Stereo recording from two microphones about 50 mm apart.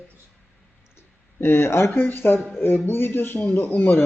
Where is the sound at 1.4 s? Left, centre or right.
Left.